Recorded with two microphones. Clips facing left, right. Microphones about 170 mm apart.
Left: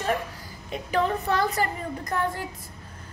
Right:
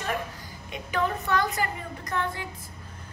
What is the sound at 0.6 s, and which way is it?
A woman's voice, 35° left (ahead or behind).